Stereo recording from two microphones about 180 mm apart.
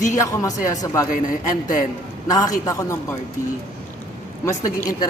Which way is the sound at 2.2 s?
20° left (ahead or behind).